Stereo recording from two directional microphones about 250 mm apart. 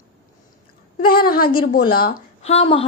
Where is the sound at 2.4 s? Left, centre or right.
Left.